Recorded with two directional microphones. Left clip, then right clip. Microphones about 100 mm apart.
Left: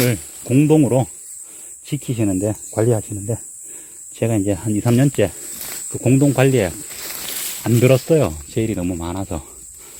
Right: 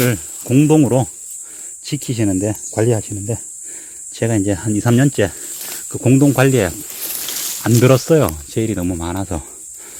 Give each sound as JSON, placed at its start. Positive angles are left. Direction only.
{"t": 0.0, "sound": "snake", "side_deg": -20}
{"t": 0.5, "sound": "speech", "side_deg": -30}
{"t": 1.8, "sound": "speech", "side_deg": -20}
{"t": 5.9, "sound": "speech", "side_deg": -40}
{"t": 7.6, "sound": "speech", "side_deg": -50}
{"t": 8.4, "sound": "speech", "side_deg": -20}